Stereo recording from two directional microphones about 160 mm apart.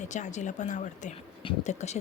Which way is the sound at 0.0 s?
50° left (ahead or behind).